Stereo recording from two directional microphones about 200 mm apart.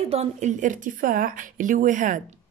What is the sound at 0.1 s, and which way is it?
A woman's voice, 35° right (ahead or behind).